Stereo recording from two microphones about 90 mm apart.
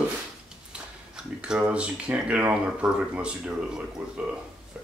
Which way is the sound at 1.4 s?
15° right (ahead or behind).